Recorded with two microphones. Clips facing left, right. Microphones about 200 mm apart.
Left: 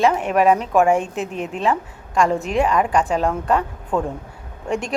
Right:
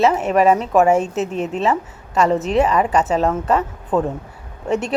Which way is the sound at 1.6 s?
5° right (ahead or behind).